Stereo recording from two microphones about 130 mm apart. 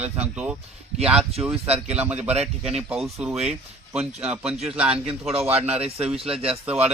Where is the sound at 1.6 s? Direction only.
50° right (ahead or behind).